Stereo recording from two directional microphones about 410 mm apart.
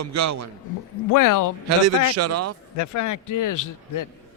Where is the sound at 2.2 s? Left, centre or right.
Right.